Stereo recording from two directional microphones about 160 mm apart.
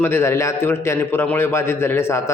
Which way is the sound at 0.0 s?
15° left (ahead or behind).